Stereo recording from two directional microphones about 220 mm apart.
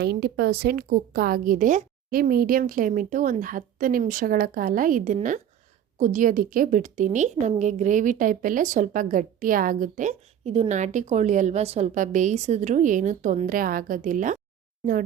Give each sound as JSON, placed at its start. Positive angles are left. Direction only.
{"t": 0.0, "sound": "a woman's voice", "side_deg": -50}